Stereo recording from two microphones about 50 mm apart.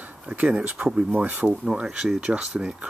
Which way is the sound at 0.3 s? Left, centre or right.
Right.